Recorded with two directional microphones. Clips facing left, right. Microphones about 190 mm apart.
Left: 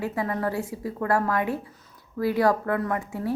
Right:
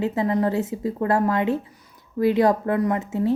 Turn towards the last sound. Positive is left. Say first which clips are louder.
# right 6 dB
turn(degrees=-20)  # may be behind; listen again after turning